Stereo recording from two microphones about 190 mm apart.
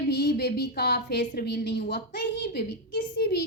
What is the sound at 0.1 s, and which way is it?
A woman's voice, 60° left (ahead or behind).